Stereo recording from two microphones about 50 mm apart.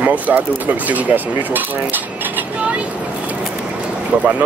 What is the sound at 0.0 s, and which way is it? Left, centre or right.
Speech, right.